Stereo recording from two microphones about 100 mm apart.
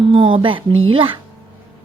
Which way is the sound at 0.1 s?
60° right (ahead or behind).